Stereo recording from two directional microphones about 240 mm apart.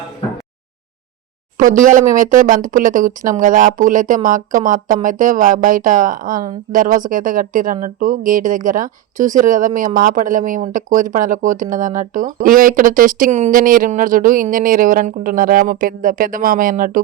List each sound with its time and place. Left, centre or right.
1.5 s speech: right